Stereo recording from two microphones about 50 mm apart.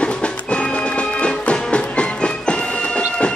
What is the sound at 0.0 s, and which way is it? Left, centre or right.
Music, left.